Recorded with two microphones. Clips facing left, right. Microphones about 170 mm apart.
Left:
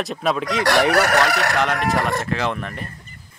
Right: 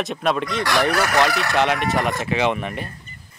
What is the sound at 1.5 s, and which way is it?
Speech, 5° right (ahead or behind).